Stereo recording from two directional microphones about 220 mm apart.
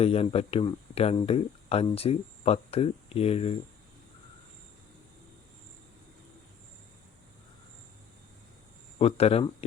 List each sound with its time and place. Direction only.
0.0 s speech: 25° left (ahead or behind)
9.0 s speech: 25° left (ahead or behind)